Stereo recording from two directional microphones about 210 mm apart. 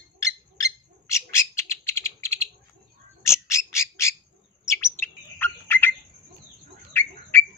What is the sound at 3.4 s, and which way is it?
Squawk, 15° left (ahead or behind).